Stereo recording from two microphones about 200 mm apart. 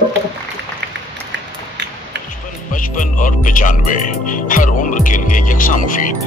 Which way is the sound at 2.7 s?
40° left (ahead or behind).